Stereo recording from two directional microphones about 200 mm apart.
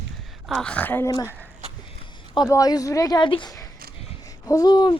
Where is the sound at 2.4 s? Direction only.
15° left (ahead or behind).